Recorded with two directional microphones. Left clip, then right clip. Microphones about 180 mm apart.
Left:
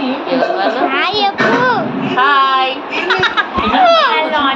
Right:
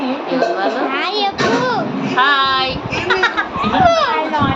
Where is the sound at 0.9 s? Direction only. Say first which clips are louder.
Left 4 dB; 5° left (ahead or behind).